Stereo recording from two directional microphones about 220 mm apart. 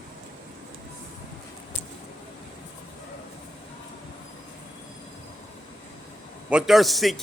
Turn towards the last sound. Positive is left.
turn(degrees=0)  # may be behind; listen again after turning